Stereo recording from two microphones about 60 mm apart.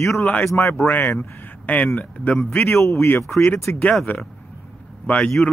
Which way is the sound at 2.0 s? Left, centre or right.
Left.